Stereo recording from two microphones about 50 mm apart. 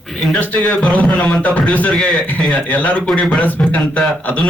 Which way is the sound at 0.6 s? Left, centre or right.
Left.